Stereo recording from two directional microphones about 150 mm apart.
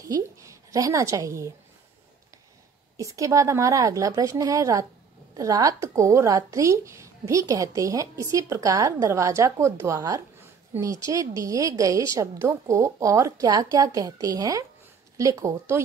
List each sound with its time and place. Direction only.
0.0 s a woman's voice: 20° right (ahead or behind)
3.0 s a woman's voice: 20° right (ahead or behind)